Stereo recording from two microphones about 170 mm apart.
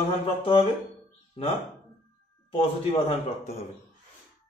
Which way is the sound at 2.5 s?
35° left (ahead or behind).